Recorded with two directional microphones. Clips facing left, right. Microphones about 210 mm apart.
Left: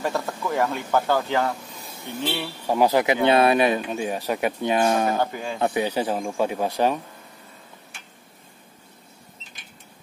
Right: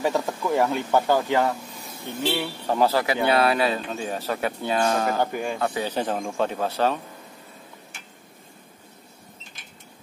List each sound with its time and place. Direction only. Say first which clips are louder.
0.0 s speech: right 2 dB; 15° right (ahead or behind)
2.6 s speech: left 3 dB; 10° left (ahead or behind)
5.2 s speech: right 1 dB; 15° right (ahead or behind)
5.6 s speech: left 7 dB; 20° left (ahead or behind)